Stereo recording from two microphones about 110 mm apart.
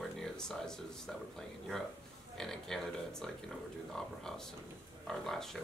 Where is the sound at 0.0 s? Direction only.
5° left (ahead or behind).